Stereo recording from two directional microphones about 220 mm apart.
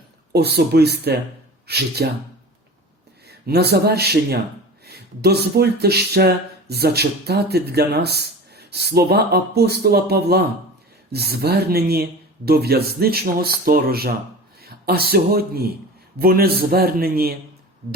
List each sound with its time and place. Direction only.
0.3 s speech: 45° right (ahead or behind)
3.2 s speech: 45° right (ahead or behind)